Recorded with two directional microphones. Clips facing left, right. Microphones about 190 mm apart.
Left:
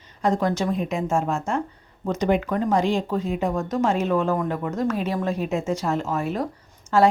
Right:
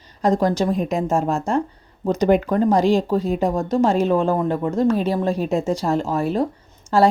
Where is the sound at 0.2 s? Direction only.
35° right (ahead or behind).